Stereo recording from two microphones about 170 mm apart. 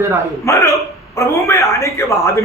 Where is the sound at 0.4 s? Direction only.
15° left (ahead or behind).